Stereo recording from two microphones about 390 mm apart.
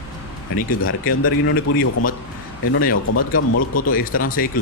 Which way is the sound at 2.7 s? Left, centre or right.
Left.